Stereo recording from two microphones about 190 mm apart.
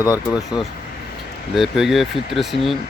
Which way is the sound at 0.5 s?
20° left (ahead or behind).